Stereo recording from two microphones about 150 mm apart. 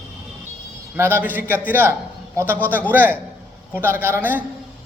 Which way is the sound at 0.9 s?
15° right (ahead or behind).